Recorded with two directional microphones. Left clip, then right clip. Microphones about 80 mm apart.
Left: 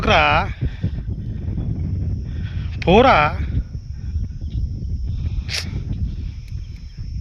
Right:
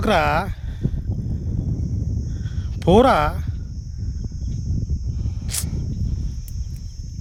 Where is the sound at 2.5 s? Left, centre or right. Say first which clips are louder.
Left 1 dB; right.